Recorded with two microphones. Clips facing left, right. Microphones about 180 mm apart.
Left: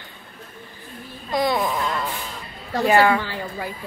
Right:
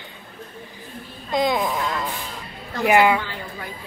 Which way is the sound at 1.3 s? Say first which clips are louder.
Right 1 dB; 20° right (ahead or behind).